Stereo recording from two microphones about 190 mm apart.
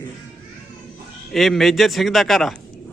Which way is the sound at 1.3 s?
Centre (ahead or behind).